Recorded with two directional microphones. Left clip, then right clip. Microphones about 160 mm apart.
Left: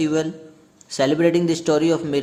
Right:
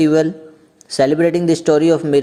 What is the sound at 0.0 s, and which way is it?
A man's voice, 30° right (ahead or behind).